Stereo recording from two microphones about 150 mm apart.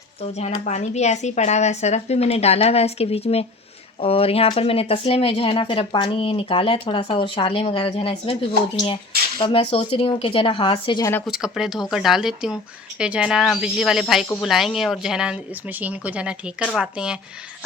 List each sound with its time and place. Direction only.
0.3 s speech: 50° left (ahead or behind)
9.4 s speech: 40° left (ahead or behind)
11.3 s speech: 5° right (ahead or behind)